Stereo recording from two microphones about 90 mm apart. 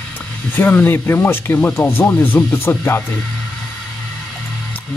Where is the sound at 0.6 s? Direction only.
20° left (ahead or behind).